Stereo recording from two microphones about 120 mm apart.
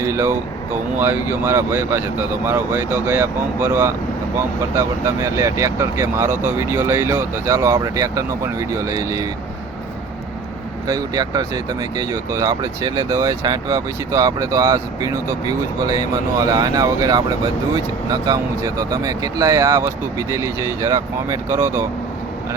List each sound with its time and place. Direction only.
0.0 s speech: 20° right (ahead or behind)
10.8 s speech: 35° right (ahead or behind)